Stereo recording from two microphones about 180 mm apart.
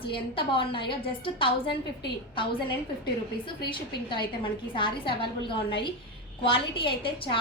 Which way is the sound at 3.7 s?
25° left (ahead or behind).